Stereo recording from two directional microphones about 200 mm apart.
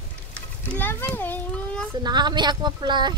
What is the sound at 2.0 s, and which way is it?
Speech, 20° right (ahead or behind).